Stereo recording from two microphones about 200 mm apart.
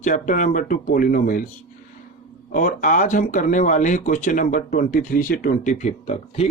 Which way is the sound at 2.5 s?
40° left (ahead or behind).